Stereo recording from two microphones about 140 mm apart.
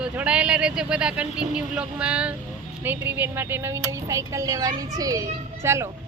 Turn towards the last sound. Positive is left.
turn(degrees=-20)  # may be behind; listen again after turning